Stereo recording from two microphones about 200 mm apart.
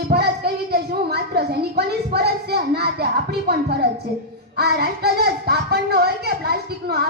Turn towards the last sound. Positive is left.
turn(degrees=-50)  # may be behind; listen again after turning